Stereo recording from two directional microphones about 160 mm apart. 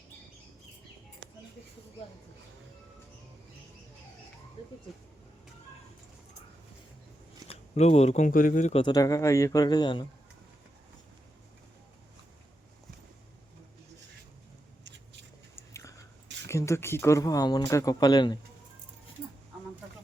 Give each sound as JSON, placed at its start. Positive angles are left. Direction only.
{"t": 7.4, "sound": "speech", "side_deg": 40}
{"t": 8.7, "sound": "speech", "side_deg": 25}
{"t": 15.5, "sound": "whispering", "side_deg": 20}
{"t": 16.5, "sound": "speech", "side_deg": 15}